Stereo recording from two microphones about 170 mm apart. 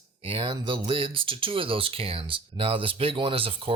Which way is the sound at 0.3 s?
30° right (ahead or behind).